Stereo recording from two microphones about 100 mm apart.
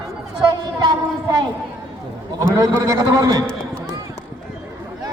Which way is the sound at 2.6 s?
35° right (ahead or behind).